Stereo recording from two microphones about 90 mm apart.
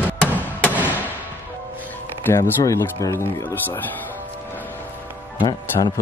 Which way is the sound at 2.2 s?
25° left (ahead or behind).